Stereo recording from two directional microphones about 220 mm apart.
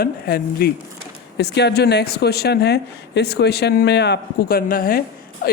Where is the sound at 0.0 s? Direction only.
45° left (ahead or behind).